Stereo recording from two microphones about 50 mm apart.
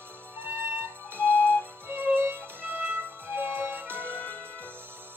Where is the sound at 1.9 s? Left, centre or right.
Right.